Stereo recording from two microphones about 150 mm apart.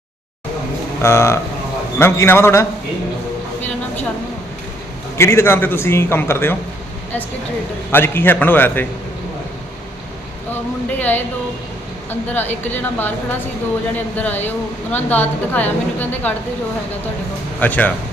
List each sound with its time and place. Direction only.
1.0 s a man's voice: 20° left (ahead or behind)
5.1 s a man's voice: 20° left (ahead or behind)
7.9 s a man's voice: 15° left (ahead or behind)
10.5 s a man's voice: 10° left (ahead or behind)
12.3 s a man's voice: 10° left (ahead or behind)
17.6 s a man's voice: 10° left (ahead or behind)